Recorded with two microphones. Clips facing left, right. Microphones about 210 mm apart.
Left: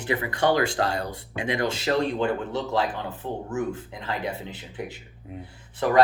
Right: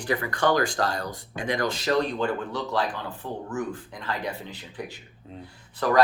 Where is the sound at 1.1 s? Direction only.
45° right (ahead or behind).